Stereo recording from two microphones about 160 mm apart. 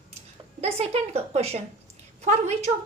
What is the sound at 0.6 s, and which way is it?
A woman's voice, 40° right (ahead or behind).